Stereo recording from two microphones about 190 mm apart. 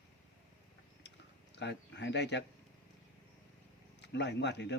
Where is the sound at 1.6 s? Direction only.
65° left (ahead or behind).